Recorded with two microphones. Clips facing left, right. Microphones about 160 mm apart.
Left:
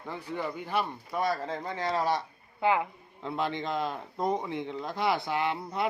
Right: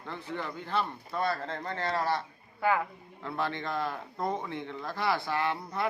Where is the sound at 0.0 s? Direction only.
10° left (ahead or behind).